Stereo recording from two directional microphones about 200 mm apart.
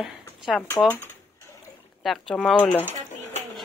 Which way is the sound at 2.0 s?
Centre (ahead or behind).